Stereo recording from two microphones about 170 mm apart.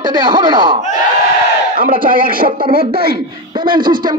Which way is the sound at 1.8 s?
55° right (ahead or behind).